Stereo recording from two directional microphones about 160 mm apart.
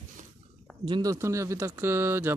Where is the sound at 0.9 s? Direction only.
25° right (ahead or behind).